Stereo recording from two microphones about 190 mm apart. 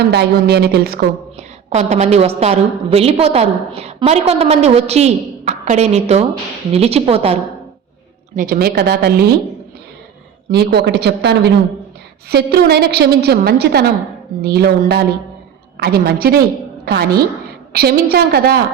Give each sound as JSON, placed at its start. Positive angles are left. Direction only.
{"t": 0.0, "sound": "a woman's voice", "side_deg": -60}
{"t": 1.4, "sound": "a woman's voice", "side_deg": -35}
{"t": 8.4, "sound": "a woman's voice", "side_deg": -50}
{"t": 10.5, "sound": "a woman's voice", "side_deg": -60}